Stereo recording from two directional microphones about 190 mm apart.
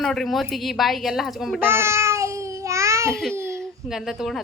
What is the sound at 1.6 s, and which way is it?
Babbling, 15° right (ahead or behind).